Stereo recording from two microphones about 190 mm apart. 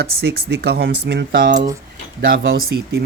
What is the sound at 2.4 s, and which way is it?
Speech, 55° right (ahead or behind).